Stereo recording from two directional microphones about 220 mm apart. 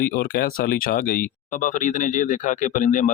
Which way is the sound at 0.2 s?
40° left (ahead or behind).